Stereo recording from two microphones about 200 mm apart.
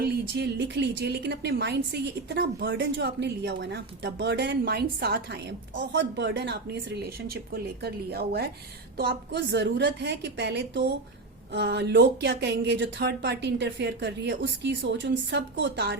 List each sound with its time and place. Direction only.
0.0 s a woman's voice: 55° right (ahead or behind)